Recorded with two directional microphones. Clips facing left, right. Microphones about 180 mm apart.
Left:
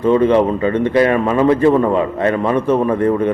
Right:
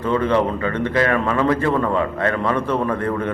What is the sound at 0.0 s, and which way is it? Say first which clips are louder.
A man's voice: left 6 dB; 20° left (ahead or behind).